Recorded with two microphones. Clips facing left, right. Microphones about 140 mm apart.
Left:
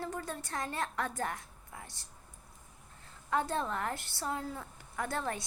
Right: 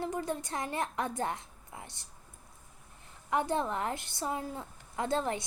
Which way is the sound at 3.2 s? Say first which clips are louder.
Right 2 dB; 15° right (ahead or behind).